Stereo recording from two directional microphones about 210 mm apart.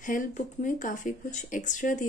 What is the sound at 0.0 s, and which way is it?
Speech, 40° left (ahead or behind).